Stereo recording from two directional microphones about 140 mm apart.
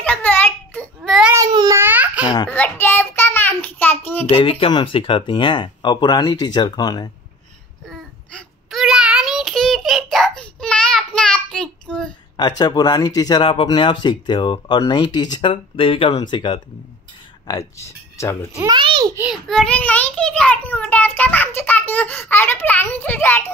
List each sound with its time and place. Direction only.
0.0 s a sound: 10° left (ahead or behind)
1.5 s babbling: 30° right (ahead or behind)
1.8 s babbling: 15° right (ahead or behind)
2.4 s child singing: 15° left (ahead or behind)
4.3 s speech: 40° left (ahead or behind)
7.8 s child singing: 5° left (ahead or behind)
12.4 s speech: 30° left (ahead or behind)
17.5 s speech: 20° left (ahead or behind)
18.7 s babbling: 35° right (ahead or behind)
19.3 s a child's voice: 5° left (ahead or behind)